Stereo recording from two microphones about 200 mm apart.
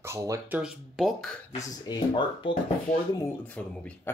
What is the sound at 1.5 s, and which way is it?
Speech, 20° left (ahead or behind).